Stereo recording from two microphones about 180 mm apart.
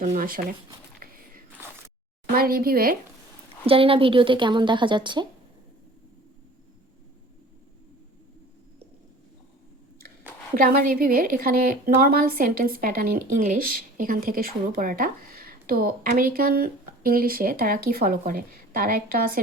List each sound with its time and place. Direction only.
0.0 s speech: 50° right (ahead or behind)
1.0 s biting: 55° right (ahead or behind)
2.3 s speech: 55° right (ahead or behind)
3.7 s a woman's voice: 30° right (ahead or behind)
10.5 s speech: 55° right (ahead or behind)